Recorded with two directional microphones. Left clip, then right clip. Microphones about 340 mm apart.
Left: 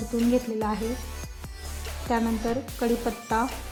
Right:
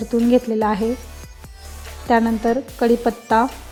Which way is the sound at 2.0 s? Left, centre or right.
Centre.